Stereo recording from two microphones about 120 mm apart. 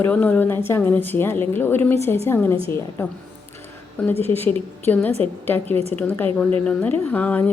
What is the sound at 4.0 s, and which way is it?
Speech, 10° left (ahead or behind).